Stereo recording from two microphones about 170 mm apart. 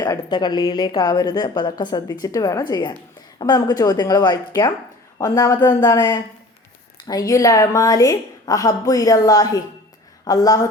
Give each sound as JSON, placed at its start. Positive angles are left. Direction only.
{"t": 0.0, "sound": "a woman's voice", "side_deg": 20}